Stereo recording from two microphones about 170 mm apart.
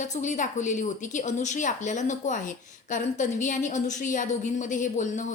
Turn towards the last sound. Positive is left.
turn(degrees=45)  # may be behind; listen again after turning